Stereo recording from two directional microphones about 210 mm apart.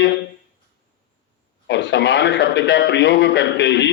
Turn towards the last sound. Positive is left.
turn(degrees=55)  # may be behind; listen again after turning